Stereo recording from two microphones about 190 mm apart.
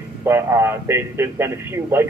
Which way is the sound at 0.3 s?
10° right (ahead or behind).